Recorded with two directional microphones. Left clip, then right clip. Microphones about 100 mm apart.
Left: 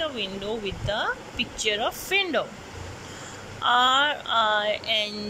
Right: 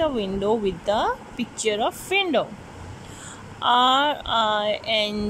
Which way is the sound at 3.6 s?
40° right (ahead or behind).